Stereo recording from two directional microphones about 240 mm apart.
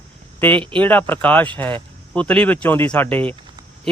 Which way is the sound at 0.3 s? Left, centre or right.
Centre.